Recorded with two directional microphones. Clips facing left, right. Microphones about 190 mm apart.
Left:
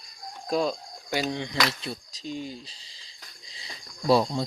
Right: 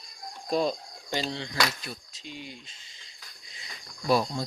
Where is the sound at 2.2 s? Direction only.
40° left (ahead or behind).